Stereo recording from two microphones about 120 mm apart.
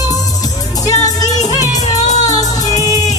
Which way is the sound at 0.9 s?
30° left (ahead or behind).